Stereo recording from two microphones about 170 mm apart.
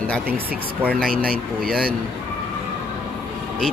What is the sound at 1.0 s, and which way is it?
Speech, 55° right (ahead or behind).